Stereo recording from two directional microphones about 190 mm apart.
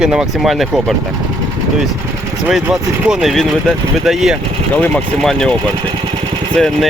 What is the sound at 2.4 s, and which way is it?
Speech, 5° right (ahead or behind).